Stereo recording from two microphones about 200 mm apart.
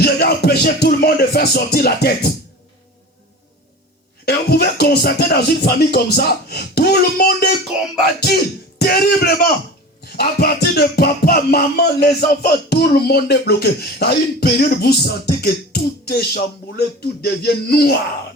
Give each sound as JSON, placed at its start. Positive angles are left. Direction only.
{"t": 0.0, "sound": "music", "side_deg": 50}
{"t": 4.3, "sound": "music", "side_deg": 55}